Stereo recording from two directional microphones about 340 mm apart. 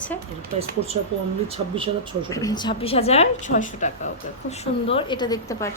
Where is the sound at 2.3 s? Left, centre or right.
Centre.